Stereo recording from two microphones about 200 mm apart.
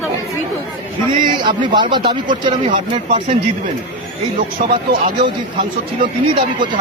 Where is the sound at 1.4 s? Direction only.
20° right (ahead or behind).